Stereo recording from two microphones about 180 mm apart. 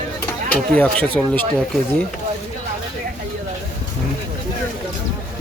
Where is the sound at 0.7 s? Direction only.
10° left (ahead or behind).